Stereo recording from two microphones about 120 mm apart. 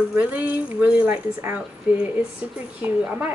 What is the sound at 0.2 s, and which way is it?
A woman's voice, 10° right (ahead or behind).